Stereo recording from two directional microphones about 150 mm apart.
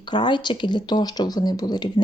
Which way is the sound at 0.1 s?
30° left (ahead or behind).